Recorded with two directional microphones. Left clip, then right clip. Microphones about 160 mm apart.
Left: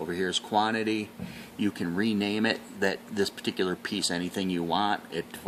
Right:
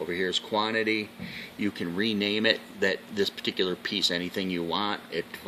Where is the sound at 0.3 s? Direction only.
45° left (ahead or behind).